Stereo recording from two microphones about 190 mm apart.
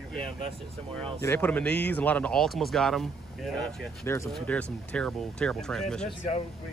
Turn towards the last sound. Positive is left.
turn(degrees=5)  # may be behind; listen again after turning